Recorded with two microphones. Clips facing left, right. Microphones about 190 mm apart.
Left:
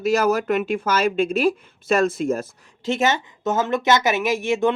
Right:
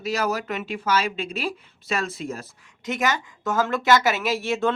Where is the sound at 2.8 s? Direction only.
25° left (ahead or behind).